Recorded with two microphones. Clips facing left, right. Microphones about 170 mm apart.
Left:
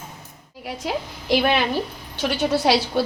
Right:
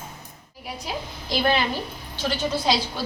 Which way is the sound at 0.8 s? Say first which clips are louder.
Left 9 dB; 70° left (ahead or behind).